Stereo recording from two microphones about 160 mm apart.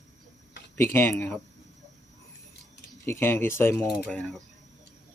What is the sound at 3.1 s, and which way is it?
Speech, 15° left (ahead or behind).